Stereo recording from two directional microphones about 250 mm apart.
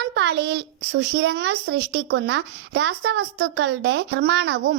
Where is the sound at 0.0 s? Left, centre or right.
Right.